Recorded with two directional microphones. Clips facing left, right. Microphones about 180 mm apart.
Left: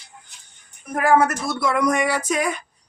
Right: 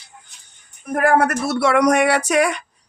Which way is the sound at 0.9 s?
55° right (ahead or behind).